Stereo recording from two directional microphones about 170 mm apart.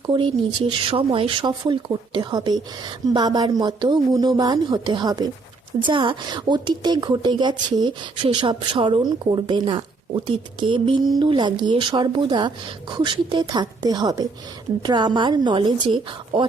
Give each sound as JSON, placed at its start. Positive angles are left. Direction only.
{"t": 0.1, "sound": "speech", "side_deg": -30}